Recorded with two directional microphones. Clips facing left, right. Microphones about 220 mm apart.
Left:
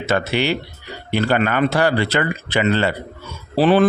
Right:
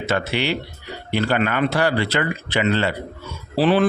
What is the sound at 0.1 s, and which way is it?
Speech, 45° left (ahead or behind).